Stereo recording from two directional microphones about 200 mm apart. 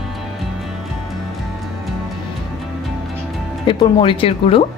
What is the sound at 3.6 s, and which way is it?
Speech, 25° left (ahead or behind).